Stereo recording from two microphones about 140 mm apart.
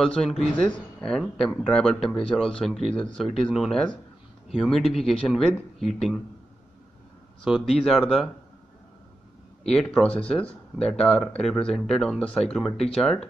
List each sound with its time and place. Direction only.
0.0 s speech: 5° left (ahead or behind)
7.4 s speech: centre (ahead or behind)
9.6 s speech: 5° left (ahead or behind)